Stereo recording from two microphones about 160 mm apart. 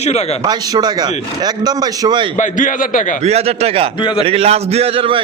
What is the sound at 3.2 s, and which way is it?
A man's voice, 40° right (ahead or behind).